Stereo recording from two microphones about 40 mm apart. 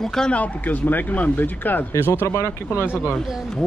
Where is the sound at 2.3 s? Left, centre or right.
Left.